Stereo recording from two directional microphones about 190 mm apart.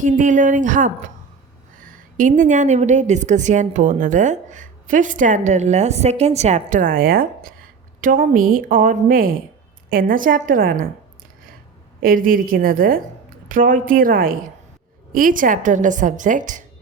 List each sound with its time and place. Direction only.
0.0 s a woman's voice: 40° right (ahead or behind)
11.9 s a woman's voice: 50° right (ahead or behind)